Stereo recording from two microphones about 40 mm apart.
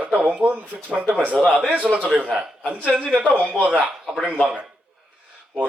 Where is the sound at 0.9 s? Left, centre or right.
Right.